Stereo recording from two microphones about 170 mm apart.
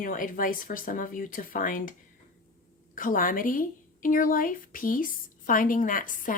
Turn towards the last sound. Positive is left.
turn(degrees=50)  # may be behind; listen again after turning